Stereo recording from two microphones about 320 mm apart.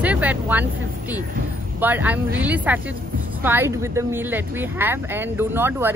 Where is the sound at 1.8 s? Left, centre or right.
Centre.